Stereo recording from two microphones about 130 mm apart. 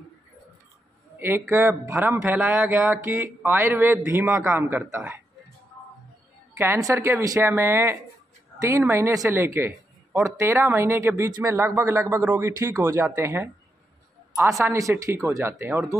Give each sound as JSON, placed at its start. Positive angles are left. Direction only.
{"t": 1.2, "sound": "speech", "side_deg": -15}
{"t": 6.5, "sound": "speech", "side_deg": -20}
{"t": 14.7, "sound": "speech", "side_deg": -25}